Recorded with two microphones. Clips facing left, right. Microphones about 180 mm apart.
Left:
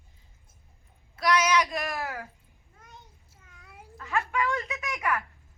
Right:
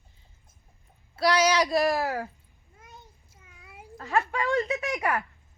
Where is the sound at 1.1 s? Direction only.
30° right (ahead or behind).